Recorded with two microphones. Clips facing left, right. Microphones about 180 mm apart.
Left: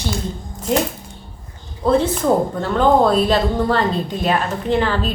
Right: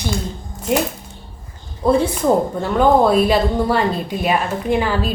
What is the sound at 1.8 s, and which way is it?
A woman's voice, 10° right (ahead or behind).